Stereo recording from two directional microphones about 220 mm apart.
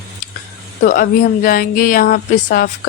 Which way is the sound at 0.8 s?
40° left (ahead or behind).